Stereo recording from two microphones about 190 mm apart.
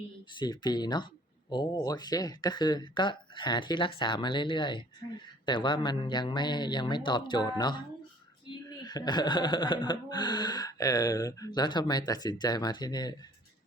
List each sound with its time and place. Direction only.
0.3 s speech: 20° left (ahead or behind)